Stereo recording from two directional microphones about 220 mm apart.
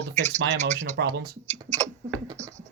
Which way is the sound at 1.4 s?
30° right (ahead or behind).